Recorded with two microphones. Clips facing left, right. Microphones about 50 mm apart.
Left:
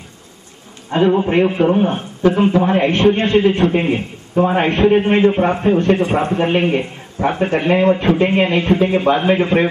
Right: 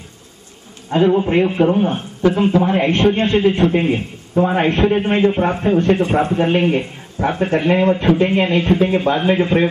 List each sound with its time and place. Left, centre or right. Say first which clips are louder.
0.9 s a man's voice: even; left
1.2 s a man's voice: left 1 dB; centre
2.3 s a man's voice: left 1 dB; centre
6.1 s a man's voice: even; centre
8.5 s a man's voice: even; centre